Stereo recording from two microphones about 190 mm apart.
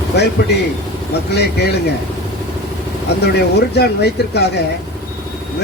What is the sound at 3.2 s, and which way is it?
Speech, 60° left (ahead or behind).